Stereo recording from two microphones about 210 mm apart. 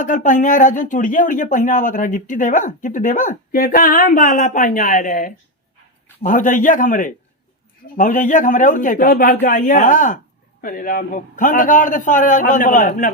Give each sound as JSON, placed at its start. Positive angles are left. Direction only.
{"t": 0.0, "sound": "speech", "side_deg": 40}